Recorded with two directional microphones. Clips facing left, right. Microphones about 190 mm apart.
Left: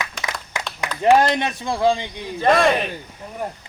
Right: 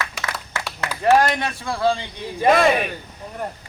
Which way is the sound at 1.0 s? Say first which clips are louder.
Left 1 dB; 20° left (ahead or behind).